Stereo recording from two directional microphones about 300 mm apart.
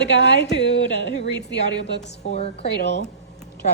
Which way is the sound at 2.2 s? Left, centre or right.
Left.